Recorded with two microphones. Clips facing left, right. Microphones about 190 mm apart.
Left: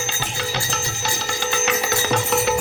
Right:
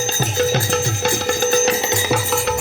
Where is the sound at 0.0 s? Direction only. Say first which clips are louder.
Right 9 dB; 40° right (ahead or behind); by 2.0 s 20° right (ahead or behind).